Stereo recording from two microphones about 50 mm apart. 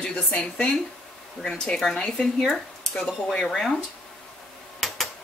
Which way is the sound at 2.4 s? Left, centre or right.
Centre.